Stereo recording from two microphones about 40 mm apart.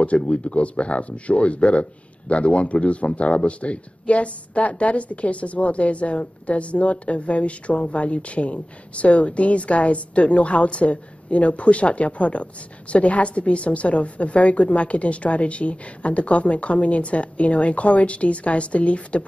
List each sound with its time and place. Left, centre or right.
0.0 s speech: left